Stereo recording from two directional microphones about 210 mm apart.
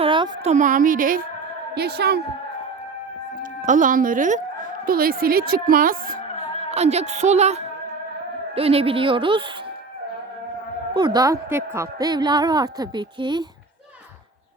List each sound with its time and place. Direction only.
0.0 s a sound: 25° right (ahead or behind)
0.5 s a woman's voice: 40° right (ahead or behind)
1.7 s a woman's voice: 50° right (ahead or behind)
3.7 s a woman's voice: 40° right (ahead or behind)
6.7 s a woman's voice: 30° right (ahead or behind)
10.9 s a woman's voice: 20° right (ahead or behind)